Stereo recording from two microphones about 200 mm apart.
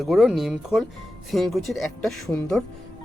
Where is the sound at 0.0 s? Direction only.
Centre (ahead or behind).